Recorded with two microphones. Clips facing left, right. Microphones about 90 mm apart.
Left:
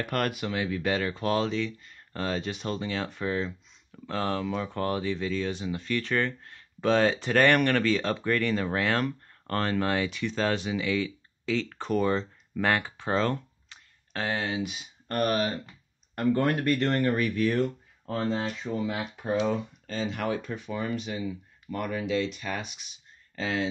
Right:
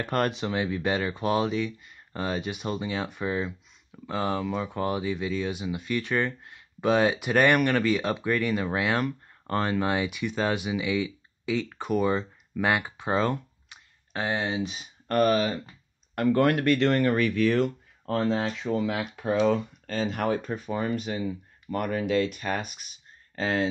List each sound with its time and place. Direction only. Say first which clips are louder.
0.0 s speech: right 2 dB; 25° right (ahead or behind)
14.6 s speech: right 1 dB; 35° right (ahead or behind)
16.2 s speech: right 3 dB; 85° right
19.9 s speech: right 3 dB; 50° right (ahead or behind)